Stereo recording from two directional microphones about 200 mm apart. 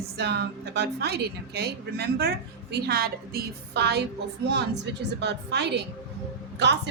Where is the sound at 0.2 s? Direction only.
55° right (ahead or behind).